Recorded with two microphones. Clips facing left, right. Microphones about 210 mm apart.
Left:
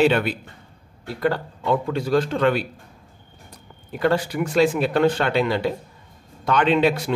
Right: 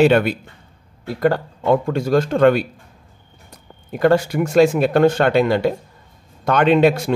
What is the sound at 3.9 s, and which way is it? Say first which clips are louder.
Speech: right 5 dB; 45° right (ahead or behind).